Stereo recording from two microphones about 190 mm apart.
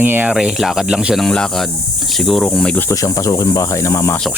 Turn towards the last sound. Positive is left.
turn(degrees=15)  # may be behind; listen again after turning